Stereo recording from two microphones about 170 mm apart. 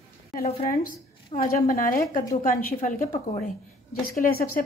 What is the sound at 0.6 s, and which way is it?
A woman's voice, 55° left (ahead or behind).